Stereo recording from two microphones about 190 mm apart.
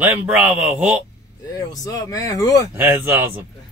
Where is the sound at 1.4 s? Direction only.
20° left (ahead or behind).